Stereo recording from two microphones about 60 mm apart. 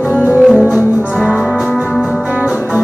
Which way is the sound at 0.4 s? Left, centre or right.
Centre.